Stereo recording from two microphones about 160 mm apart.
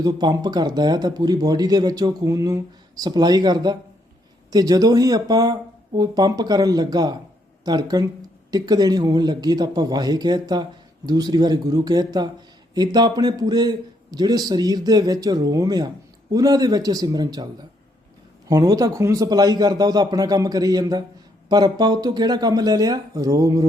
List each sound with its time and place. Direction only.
0.0 s a man's voice: 25° right (ahead or behind)